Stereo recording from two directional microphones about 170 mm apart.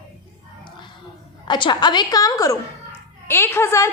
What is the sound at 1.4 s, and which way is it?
A child's voice, 25° left (ahead or behind).